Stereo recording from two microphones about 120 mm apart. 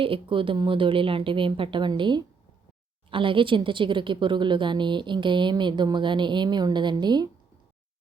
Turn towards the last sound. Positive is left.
turn(degrees=-35)  # may be behind; listen again after turning